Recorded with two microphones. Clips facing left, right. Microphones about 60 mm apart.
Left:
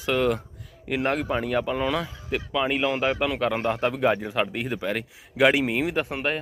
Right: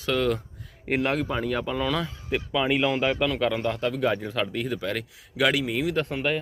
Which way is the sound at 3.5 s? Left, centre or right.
Left.